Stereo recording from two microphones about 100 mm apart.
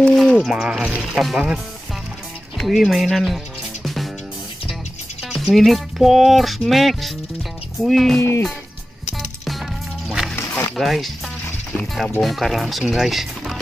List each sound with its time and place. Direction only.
0.0 s a sound: 5° left (ahead or behind)
0.5 s speech: 10° right (ahead or behind)
3.8 s music: centre (ahead or behind)
5.3 s speech: centre (ahead or behind)
8.2 s speech: 30° left (ahead or behind)
10.0 s music: centre (ahead or behind)
10.8 s speech: centre (ahead or behind)